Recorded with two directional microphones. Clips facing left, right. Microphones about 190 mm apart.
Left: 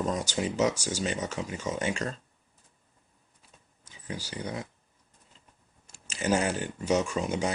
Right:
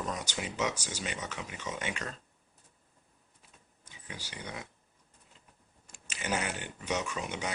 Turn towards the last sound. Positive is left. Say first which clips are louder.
# left 7 dB
turn(degrees=35)  # may be behind; listen again after turning